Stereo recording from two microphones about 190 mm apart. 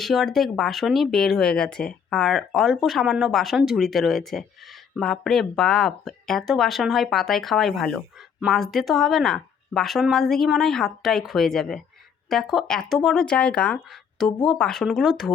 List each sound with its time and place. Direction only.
0.0 s speech: centre (ahead or behind)